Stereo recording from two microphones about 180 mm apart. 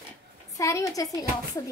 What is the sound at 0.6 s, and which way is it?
Speech, 15° left (ahead or behind).